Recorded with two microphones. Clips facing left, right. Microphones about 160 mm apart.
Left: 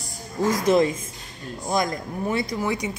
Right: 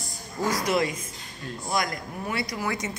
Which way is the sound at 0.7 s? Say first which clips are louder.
Left 6 dB; 25° left (ahead or behind).